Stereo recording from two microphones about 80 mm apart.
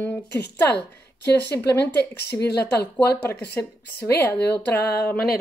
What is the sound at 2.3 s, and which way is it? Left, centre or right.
Speech, centre.